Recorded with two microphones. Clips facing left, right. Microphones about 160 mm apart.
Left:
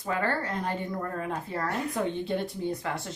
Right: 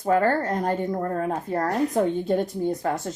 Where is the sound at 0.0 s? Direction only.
45° right (ahead or behind).